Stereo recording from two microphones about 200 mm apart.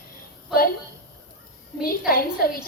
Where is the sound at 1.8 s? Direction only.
45° left (ahead or behind).